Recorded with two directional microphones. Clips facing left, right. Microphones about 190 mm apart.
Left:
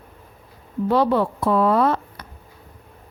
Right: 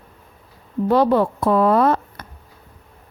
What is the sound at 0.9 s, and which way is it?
Speech, 45° right (ahead or behind).